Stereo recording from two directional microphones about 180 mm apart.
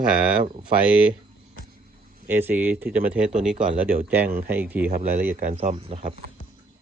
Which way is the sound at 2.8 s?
50° right (ahead or behind).